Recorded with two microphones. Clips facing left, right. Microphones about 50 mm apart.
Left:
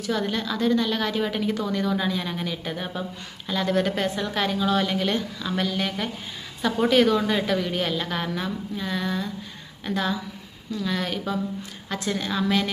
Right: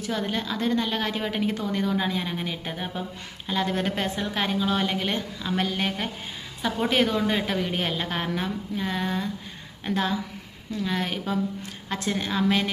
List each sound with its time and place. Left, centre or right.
0.0 s a woman's voice: right
2.7 s a woman's voice: centre
3.5 s a woman's voice: right